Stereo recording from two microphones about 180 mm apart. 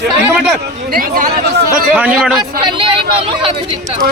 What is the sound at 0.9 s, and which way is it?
Speech, 50° right (ahead or behind).